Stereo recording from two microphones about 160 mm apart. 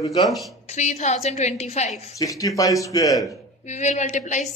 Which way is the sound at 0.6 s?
45° left (ahead or behind).